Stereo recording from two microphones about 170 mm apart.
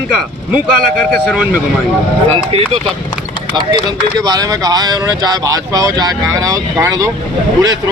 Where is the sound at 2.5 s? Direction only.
35° right (ahead or behind).